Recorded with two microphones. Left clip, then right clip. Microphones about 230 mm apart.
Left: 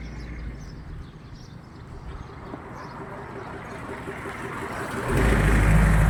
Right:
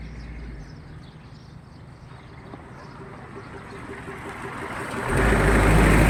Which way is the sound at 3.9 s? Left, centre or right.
Centre.